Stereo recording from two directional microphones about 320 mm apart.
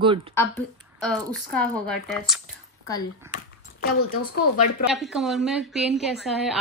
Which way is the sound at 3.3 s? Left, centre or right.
Left.